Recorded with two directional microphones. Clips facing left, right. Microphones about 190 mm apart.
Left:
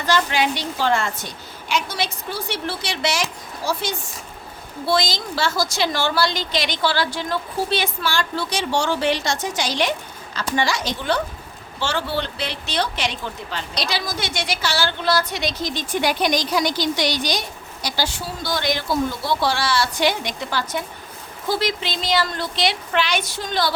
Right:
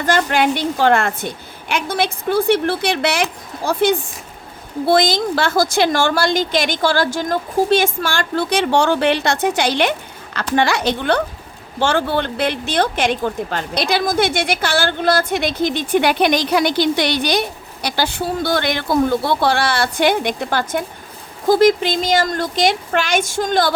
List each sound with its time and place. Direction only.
0.0 s a woman's voice: 50° right (ahead or behind)